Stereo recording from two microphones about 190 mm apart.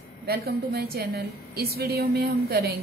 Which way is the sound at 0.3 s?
55° right (ahead or behind).